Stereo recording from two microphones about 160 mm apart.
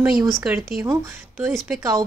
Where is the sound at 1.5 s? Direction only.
5° right (ahead or behind).